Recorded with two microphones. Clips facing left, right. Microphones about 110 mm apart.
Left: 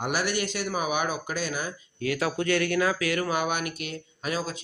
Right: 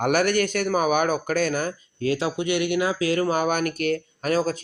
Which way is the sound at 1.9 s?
30° right (ahead or behind).